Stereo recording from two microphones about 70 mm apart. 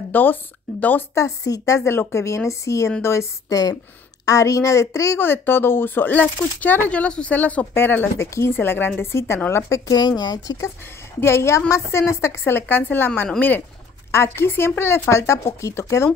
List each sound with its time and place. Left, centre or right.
0.1 s speech: left
1.1 s a woman's voice: left
5.2 s speech: left
6.9 s speech: centre
9.0 s speech: left
9.8 s speech: left
11.1 s speech: left